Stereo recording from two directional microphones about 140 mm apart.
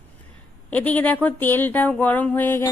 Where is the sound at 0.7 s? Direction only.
10° left (ahead or behind).